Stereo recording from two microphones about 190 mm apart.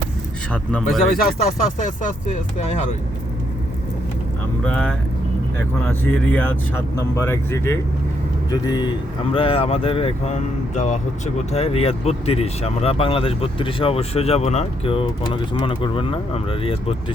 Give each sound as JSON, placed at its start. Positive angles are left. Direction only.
{"t": 0.5, "sound": "speech", "side_deg": 5}
{"t": 1.8, "sound": "speech", "side_deg": 40}
{"t": 4.6, "sound": "speech", "side_deg": 5}